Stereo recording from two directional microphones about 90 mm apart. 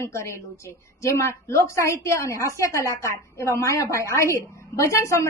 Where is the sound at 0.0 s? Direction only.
30° left (ahead or behind).